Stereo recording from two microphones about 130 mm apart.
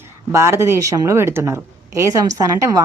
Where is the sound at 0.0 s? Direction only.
20° right (ahead or behind).